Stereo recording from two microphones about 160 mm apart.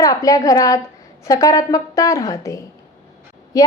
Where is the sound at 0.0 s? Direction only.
20° left (ahead or behind).